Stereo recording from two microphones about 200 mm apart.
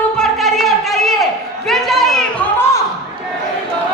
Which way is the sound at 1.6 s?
Centre (ahead or behind).